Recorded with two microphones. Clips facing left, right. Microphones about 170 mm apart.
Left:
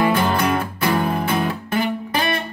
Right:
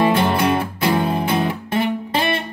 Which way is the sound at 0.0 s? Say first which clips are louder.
Right 2 dB; 25° right (ahead or behind).